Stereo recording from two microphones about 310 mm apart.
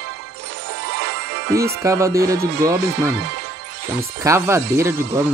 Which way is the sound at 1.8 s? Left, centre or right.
Centre.